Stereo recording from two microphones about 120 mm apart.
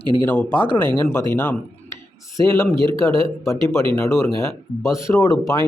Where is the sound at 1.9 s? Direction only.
25° left (ahead or behind).